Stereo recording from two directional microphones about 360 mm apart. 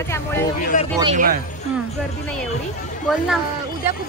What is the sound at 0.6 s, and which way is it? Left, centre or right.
Speech, left.